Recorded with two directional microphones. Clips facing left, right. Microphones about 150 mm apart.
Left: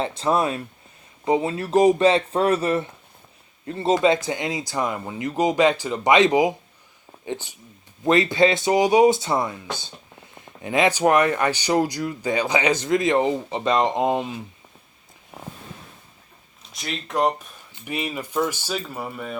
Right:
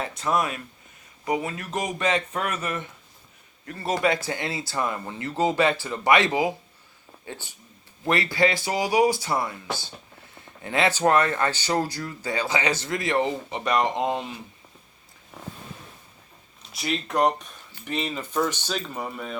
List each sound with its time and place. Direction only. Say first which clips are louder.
0.0 s speech: left 4 dB; 30° left (ahead or behind)
16.7 s speech: right 1 dB; centre (ahead or behind)
17.7 s speech: left 1 dB; 15° left (ahead or behind)